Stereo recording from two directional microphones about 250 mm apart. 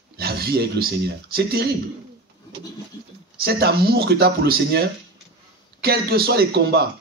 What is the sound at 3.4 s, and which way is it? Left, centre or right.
Speech, right.